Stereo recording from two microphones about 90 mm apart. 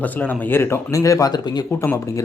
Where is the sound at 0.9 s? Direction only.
35° left (ahead or behind).